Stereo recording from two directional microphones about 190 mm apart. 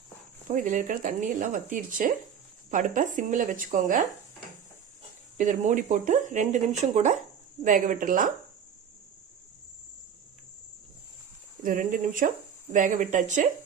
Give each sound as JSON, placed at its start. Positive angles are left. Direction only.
{"t": 0.4, "sound": "speech", "side_deg": -45}
{"t": 5.4, "sound": "speech", "side_deg": -40}
{"t": 11.6, "sound": "speech", "side_deg": -45}